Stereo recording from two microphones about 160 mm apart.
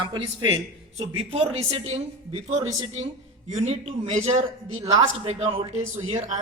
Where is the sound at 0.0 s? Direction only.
30° right (ahead or behind).